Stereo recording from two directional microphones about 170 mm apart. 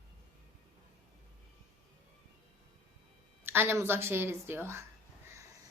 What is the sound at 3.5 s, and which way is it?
A woman's voice, 15° right (ahead or behind).